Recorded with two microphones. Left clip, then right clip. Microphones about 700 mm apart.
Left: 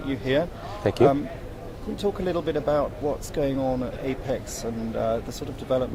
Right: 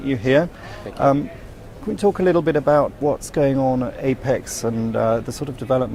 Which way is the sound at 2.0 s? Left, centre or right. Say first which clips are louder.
Right 9 dB; right.